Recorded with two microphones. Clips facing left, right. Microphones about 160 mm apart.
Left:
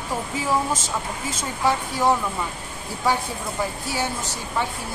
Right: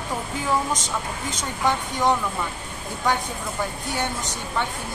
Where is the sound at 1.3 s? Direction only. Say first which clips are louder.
Left 1 dB; 5° left (ahead or behind).